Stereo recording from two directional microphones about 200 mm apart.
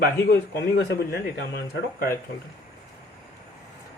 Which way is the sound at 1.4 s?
55° left (ahead or behind).